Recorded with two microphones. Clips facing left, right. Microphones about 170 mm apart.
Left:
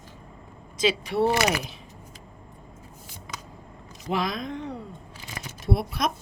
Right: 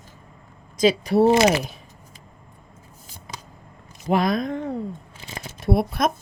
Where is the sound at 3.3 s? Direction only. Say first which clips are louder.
Right 1 dB; 30° right (ahead or behind).